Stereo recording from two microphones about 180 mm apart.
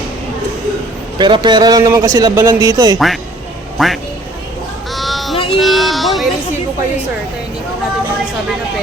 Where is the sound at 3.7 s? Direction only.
Centre (ahead or behind).